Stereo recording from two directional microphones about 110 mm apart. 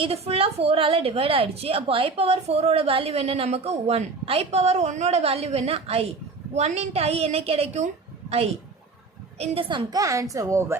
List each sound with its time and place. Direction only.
0.0 s a woman's voice: 60° right (ahead or behind)
6.5 s a woman's voice: 80° right
9.4 s a woman's voice: 50° right (ahead or behind)
10.0 s a woman's voice: 30° right (ahead or behind)